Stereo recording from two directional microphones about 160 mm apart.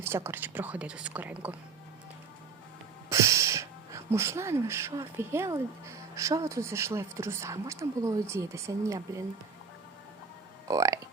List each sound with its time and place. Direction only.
0.0 s speech: 15° right (ahead or behind)
3.1 s speech: 20° right (ahead or behind)
10.7 s speech: 20° right (ahead or behind)